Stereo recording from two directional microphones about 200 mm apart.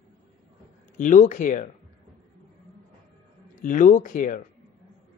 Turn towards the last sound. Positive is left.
turn(degrees=40)  # may be behind; listen again after turning